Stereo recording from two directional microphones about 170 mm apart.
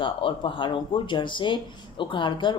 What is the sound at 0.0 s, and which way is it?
Speech, 30° left (ahead or behind).